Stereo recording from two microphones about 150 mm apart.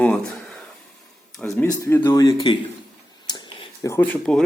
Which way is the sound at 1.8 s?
20° left (ahead or behind).